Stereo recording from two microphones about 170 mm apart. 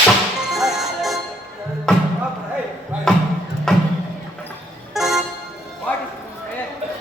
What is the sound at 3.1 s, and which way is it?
Music, 5° left (ahead or behind).